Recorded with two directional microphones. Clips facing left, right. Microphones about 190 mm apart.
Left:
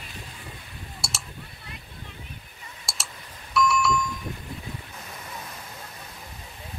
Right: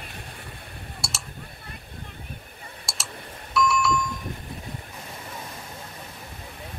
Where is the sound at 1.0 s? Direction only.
Centre (ahead or behind).